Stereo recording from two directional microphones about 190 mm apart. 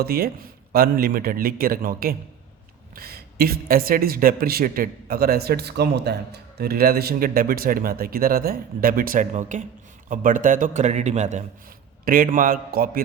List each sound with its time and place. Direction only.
0.0 s speech: 50° right (ahead or behind)